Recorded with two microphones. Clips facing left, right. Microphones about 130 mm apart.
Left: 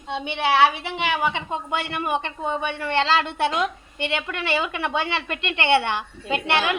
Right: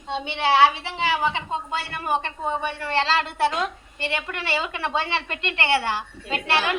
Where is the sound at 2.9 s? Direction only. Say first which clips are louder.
Left 2 dB; 20° left (ahead or behind).